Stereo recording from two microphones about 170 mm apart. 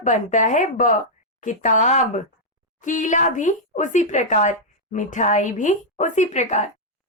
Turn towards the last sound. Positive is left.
turn(degrees=40)  # may be behind; listen again after turning